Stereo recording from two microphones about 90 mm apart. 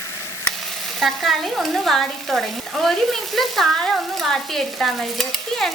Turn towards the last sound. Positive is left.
turn(degrees=5)  # may be behind; listen again after turning